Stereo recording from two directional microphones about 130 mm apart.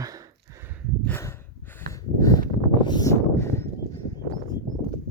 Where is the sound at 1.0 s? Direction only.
20° left (ahead or behind).